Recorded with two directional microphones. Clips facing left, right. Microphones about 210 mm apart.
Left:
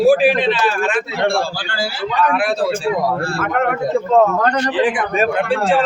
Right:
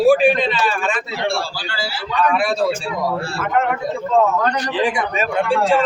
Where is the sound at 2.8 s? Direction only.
55° left (ahead or behind).